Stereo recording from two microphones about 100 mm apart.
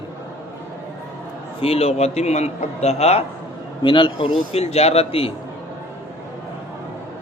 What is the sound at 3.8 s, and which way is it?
Speech, 55° left (ahead or behind).